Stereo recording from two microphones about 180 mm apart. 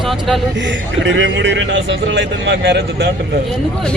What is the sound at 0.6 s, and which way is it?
A man's voice, 80° right.